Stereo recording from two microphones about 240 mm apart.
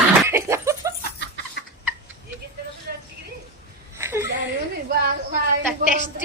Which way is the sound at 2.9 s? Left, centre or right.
Right.